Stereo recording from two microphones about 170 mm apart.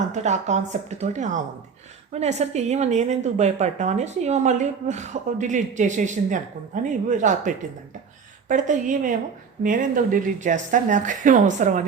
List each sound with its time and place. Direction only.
0.1 s a woman's voice: 45° right (ahead or behind)